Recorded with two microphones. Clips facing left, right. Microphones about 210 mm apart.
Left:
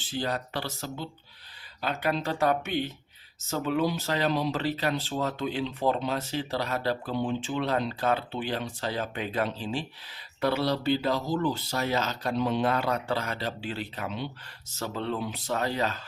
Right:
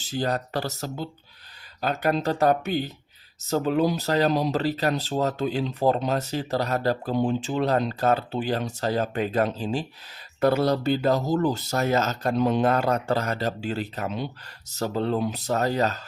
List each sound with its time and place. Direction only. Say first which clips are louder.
0.0 s speech: right 4 dB; 40° right (ahead or behind)